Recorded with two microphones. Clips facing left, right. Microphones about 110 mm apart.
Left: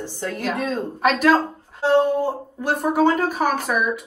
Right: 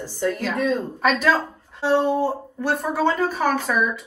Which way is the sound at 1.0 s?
10° left (ahead or behind).